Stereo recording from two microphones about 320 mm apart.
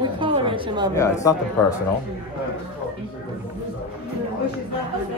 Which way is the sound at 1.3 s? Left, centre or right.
Centre.